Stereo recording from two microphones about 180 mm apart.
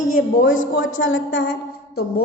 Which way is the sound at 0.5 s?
90° left.